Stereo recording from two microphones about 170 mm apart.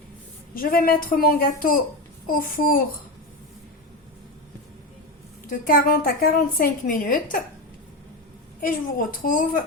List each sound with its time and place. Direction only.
0.5 s a woman's voice: 60° left (ahead or behind)
5.5 s a woman's voice: 55° left (ahead or behind)
8.6 s a woman's voice: 50° left (ahead or behind)